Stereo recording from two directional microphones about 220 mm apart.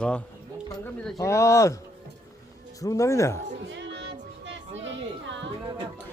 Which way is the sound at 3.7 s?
55° right (ahead or behind).